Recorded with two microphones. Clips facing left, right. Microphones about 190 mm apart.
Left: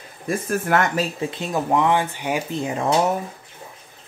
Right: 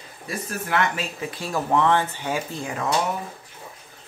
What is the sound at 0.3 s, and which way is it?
Speech, 50° left (ahead or behind).